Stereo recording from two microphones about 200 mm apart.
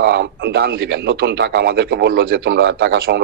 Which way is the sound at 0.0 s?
60° right (ahead or behind).